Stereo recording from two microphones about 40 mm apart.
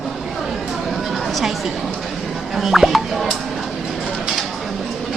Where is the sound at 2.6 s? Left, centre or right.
Centre.